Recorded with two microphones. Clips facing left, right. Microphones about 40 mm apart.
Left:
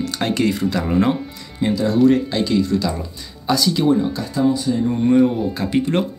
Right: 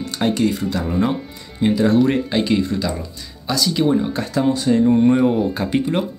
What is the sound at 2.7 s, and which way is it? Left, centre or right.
Speech, centre.